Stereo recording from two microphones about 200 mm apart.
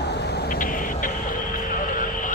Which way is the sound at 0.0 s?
55° left (ahead or behind).